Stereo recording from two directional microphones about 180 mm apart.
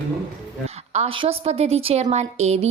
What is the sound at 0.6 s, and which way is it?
A woman's voice, 35° right (ahead or behind).